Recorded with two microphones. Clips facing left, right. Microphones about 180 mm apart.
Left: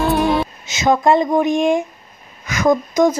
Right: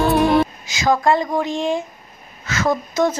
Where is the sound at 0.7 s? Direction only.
20° left (ahead or behind).